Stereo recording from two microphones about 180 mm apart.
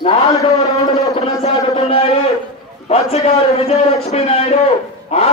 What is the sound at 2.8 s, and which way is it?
A man's voice, 35° left (ahead or behind).